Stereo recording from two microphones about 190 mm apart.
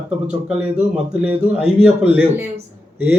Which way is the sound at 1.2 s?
5° right (ahead or behind).